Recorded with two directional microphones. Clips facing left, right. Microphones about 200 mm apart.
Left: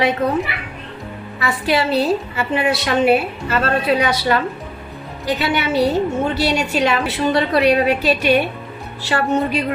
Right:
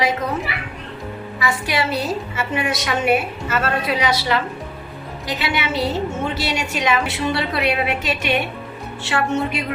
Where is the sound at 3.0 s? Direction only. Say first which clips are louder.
Left 1 dB; 30° left (ahead or behind).